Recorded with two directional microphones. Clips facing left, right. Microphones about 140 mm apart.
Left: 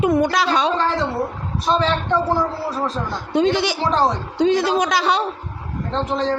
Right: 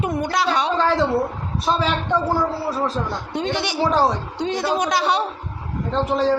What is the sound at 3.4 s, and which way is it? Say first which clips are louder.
A woman's voice: even; 90° left.